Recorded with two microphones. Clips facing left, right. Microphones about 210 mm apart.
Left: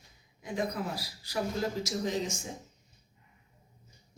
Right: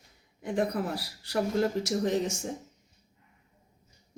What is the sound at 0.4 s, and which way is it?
A man's voice, 65° right (ahead or behind).